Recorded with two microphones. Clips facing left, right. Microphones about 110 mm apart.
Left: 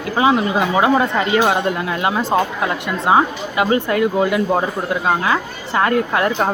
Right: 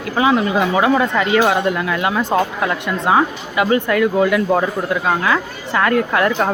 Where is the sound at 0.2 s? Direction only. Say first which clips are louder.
Even; 25° left (ahead or behind).